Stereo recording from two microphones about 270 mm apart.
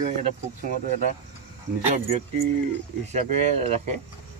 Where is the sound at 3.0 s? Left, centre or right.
Right.